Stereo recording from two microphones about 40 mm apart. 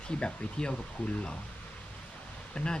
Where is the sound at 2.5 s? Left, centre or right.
Left.